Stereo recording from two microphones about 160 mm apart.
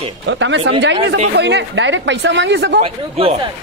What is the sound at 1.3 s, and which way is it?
Speech, 90° right.